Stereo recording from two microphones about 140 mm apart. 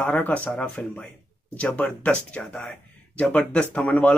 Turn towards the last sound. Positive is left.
turn(degrees=10)  # may be behind; listen again after turning